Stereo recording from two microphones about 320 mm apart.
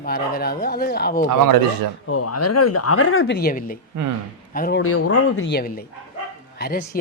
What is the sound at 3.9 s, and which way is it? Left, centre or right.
Speech, right.